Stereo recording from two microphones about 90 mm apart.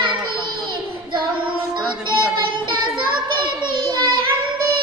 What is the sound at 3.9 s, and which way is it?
Child singing, 50° right (ahead or behind).